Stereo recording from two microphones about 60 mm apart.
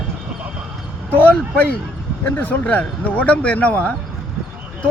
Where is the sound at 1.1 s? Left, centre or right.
Left.